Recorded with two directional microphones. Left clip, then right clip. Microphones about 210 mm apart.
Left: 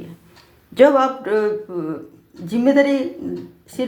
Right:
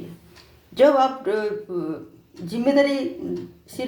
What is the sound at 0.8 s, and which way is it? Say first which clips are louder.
Speech: left 3 dB; 30° left (ahead or behind).